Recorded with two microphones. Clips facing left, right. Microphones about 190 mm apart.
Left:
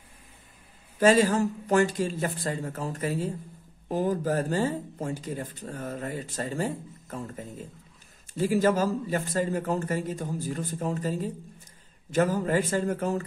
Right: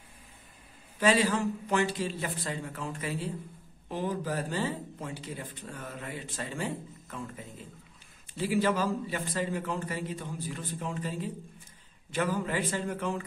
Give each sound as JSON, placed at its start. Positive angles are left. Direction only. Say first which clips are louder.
{"t": 0.9, "sound": "speech", "louder": "left 5 dB", "side_deg": 45}